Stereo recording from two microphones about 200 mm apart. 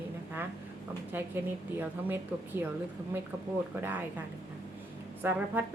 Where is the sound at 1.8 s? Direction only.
10° right (ahead or behind).